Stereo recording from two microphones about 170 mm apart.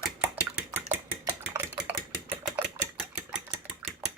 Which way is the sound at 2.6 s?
5° right (ahead or behind).